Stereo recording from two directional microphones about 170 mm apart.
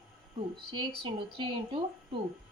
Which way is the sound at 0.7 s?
25° right (ahead or behind).